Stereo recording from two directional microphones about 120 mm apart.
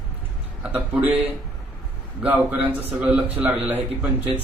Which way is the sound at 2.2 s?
10° right (ahead or behind).